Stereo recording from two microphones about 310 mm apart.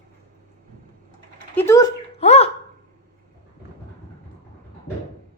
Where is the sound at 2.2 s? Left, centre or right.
Left.